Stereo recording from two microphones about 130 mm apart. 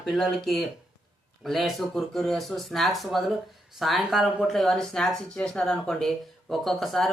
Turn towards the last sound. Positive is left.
turn(degrees=0)  # may be behind; listen again after turning